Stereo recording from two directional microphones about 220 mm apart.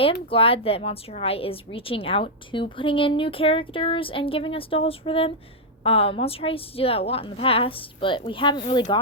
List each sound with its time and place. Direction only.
0.0 s a woman's voice: 25° left (ahead or behind)